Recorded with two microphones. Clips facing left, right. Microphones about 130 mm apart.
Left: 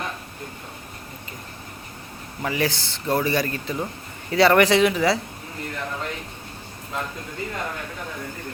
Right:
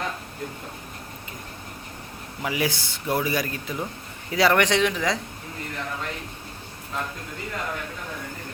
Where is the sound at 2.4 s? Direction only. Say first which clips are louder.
Left 2 dB; 10° right (ahead or behind).